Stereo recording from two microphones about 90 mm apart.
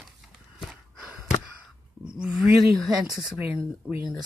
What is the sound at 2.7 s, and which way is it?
Speech, centre (ahead or behind).